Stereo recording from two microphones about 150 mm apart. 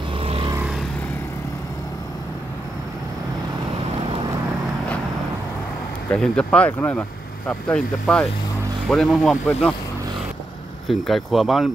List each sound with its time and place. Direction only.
0.2 s vehicle: 40° right (ahead or behind)
6.1 s speech: 5° left (ahead or behind)
10.9 s speech: centre (ahead or behind)